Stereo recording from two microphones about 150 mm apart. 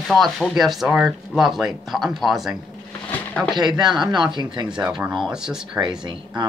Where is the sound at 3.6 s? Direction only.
30° right (ahead or behind).